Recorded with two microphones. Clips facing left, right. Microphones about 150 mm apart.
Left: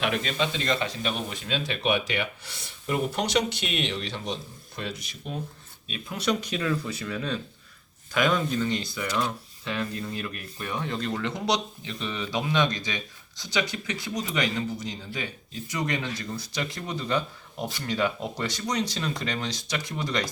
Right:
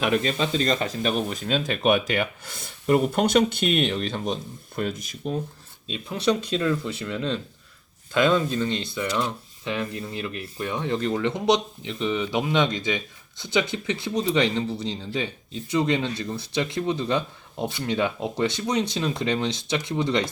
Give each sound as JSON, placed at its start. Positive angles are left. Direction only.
{"t": 0.0, "sound": "speech", "side_deg": -40}
{"t": 6.1, "sound": "speech", "side_deg": -25}
{"t": 6.6, "sound": "speech", "side_deg": 0}
{"t": 7.1, "sound": "speech", "side_deg": -20}